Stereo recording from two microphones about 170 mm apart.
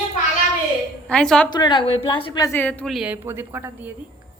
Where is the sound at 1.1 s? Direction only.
5° left (ahead or behind).